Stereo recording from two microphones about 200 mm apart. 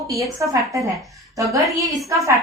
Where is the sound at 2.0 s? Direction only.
15° right (ahead or behind).